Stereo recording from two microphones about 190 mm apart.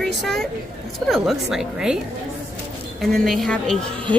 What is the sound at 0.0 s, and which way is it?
A woman's voice, centre (ahead or behind).